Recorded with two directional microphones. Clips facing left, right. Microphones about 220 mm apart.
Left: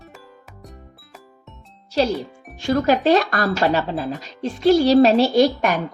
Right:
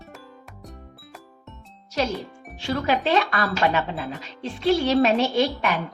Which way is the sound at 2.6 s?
45° left (ahead or behind).